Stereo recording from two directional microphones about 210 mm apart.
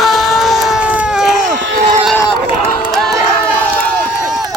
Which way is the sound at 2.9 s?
Centre (ahead or behind).